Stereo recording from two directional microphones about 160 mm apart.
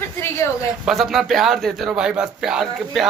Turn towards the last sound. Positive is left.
turn(degrees=0)  # may be behind; listen again after turning